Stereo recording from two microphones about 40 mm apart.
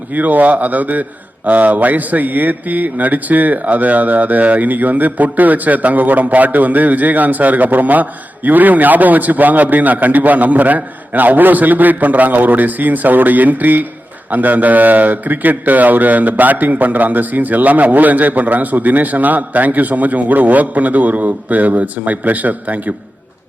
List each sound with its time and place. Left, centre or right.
0.1 s a man's voice: right